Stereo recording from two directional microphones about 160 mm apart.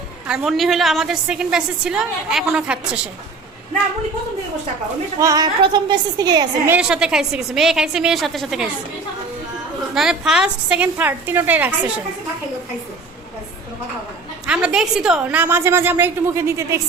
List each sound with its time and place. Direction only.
0.3 s a woman's voice: 5° right (ahead or behind)
5.2 s a woman's voice: 25° right (ahead or behind)
6.7 s a woman's voice: 5° right (ahead or behind)
9.9 s a woman's voice: 5° right (ahead or behind)
14.4 s a woman's voice: 5° right (ahead or behind)